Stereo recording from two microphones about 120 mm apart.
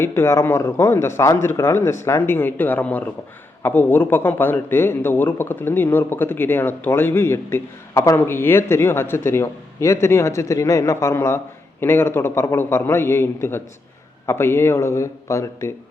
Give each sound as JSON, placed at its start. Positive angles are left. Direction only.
{"t": 0.0, "sound": "a man's voice", "side_deg": 20}